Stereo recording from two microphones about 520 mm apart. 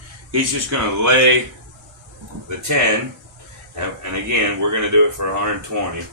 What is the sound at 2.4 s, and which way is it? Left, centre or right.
Speech, right.